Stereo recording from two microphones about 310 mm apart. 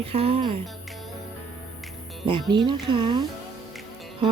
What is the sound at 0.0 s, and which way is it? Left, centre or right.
Speech, centre.